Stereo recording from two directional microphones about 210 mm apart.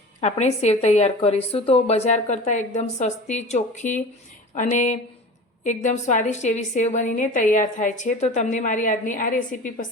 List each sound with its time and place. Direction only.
0.2 s a woman's voice: 30° left (ahead or behind)